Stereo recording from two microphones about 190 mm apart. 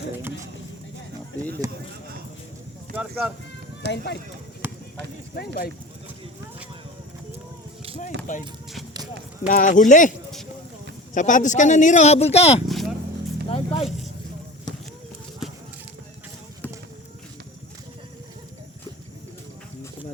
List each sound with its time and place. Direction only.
0.2 s a sound: 10° right (ahead or behind)
1.6 s speech: 15° right (ahead or behind)
2.9 s speech: 5° right (ahead or behind)
3.8 s speech: 65° left (ahead or behind)
4.6 s run: 10° right (ahead or behind)
8.3 s speech: 40° left (ahead or behind)
9.5 s speech: 45° left (ahead or behind)
11.1 s speech: 40° left (ahead or behind)
12.6 s vehicle: centre (ahead or behind)
13.5 s vehicle: 30° left (ahead or behind)